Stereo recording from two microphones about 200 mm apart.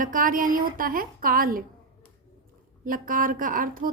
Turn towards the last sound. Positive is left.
turn(degrees=-45)  # may be behind; listen again after turning